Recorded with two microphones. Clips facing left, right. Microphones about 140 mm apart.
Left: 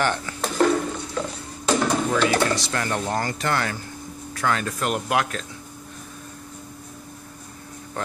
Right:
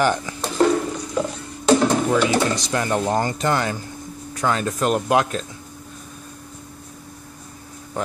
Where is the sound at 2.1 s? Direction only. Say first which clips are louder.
Right 2 dB; 15° right (ahead or behind).